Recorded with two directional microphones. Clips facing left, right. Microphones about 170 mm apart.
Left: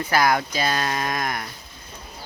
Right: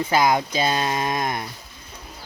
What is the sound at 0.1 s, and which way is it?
Speech, 20° right (ahead or behind).